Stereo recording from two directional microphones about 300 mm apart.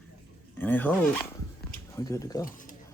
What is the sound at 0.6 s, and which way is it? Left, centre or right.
Speech, centre.